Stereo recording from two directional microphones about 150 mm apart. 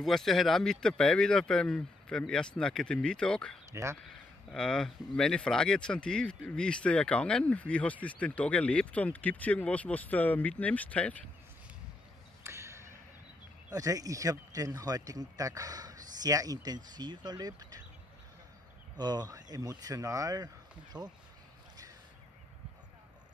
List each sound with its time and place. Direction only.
0.0 s speech: centre (ahead or behind)
3.7 s speech: 20° right (ahead or behind)
4.0 s speech: 5° left (ahead or behind)
12.4 s a sound: 20° right (ahead or behind)
13.7 s speech: 25° right (ahead or behind)
18.9 s speech: 25° right (ahead or behind)